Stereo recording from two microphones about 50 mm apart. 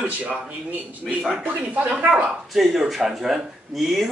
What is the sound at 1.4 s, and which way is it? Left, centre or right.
Speech, right.